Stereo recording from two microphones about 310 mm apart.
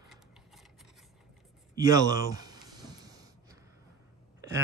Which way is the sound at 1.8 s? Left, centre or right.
Centre.